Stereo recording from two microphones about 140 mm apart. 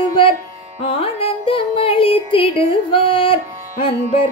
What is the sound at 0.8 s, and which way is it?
Music, 40° left (ahead or behind).